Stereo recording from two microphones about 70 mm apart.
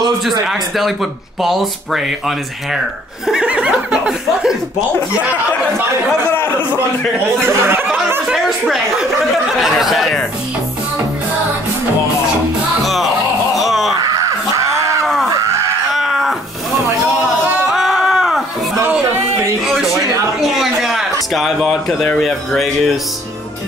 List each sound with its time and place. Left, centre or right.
0.2 s speech: centre
7.4 s speech: right
8.4 s speech: centre
12.8 s music: centre
13.6 s wail: centre
15.9 s a sound: centre
17.6 s a sound: centre
20.3 s a sound: centre
22.5 s speech: centre